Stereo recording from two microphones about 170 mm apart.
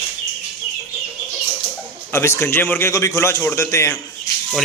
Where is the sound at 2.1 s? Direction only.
15° left (ahead or behind).